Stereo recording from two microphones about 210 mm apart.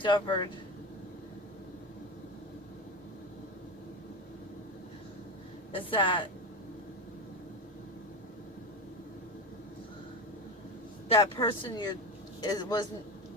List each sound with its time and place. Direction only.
0.0 s speech: 20° left (ahead or behind)
5.7 s speech: 25° left (ahead or behind)
11.1 s speech: 20° left (ahead or behind)